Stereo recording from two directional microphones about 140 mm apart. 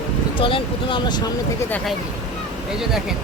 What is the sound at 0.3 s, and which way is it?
Speech, 40° left (ahead or behind).